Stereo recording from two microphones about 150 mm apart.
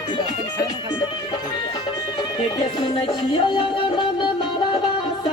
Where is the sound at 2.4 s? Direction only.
40° left (ahead or behind).